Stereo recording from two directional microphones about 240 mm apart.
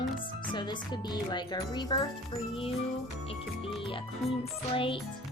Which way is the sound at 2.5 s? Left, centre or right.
Left.